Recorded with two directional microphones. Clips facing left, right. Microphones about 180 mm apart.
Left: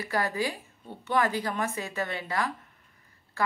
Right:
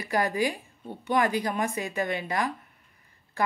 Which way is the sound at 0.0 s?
15° right (ahead or behind).